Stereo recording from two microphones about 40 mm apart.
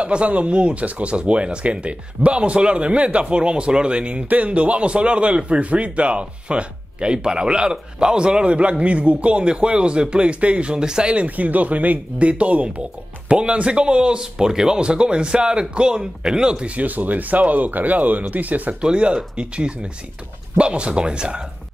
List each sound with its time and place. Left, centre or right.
0.0 s a man's voice: right
11.1 s a man's voice: right
18.8 s a man's voice: right